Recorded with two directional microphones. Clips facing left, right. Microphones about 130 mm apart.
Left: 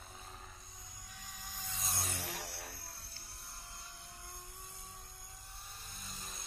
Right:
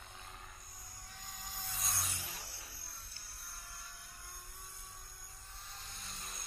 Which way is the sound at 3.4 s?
20° left (ahead or behind).